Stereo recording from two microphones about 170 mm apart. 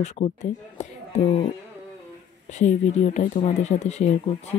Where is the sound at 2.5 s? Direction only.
45° left (ahead or behind).